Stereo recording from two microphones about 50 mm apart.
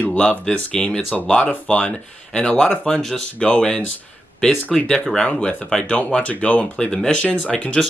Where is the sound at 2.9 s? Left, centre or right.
Centre.